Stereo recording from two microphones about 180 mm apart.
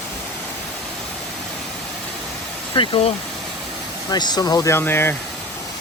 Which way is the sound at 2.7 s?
30° left (ahead or behind).